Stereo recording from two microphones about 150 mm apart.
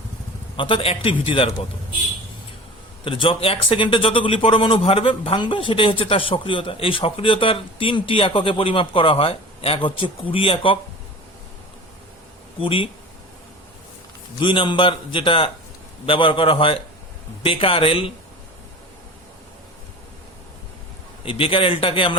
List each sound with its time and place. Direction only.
0.5 s a man's voice: 35° left (ahead or behind)
3.0 s a man's voice: 35° left (ahead or behind)
12.5 s a man's voice: 35° left (ahead or behind)
14.3 s a man's voice: 35° left (ahead or behind)
21.2 s a man's voice: 35° left (ahead or behind)